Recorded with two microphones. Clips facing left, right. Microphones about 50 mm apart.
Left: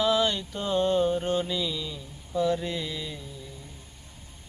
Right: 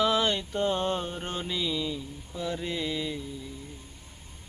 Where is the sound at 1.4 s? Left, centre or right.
Centre.